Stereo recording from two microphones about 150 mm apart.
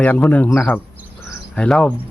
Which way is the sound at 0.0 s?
10° left (ahead or behind).